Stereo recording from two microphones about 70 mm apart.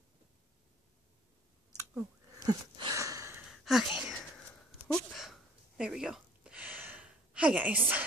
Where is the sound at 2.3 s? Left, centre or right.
Right.